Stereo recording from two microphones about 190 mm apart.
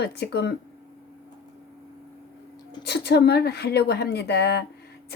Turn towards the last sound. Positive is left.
turn(degrees=60)  # may be behind; listen again after turning